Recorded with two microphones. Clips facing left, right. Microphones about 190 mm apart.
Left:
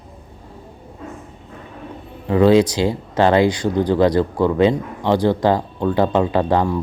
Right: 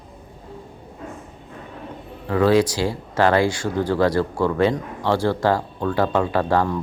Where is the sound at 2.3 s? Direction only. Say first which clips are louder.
Left 4 dB; 20° left (ahead or behind).